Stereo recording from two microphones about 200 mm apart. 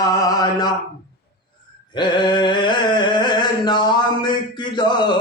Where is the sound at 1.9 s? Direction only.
20° left (ahead or behind).